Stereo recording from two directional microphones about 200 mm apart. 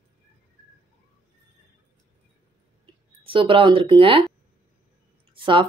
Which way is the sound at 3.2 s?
25° right (ahead or behind).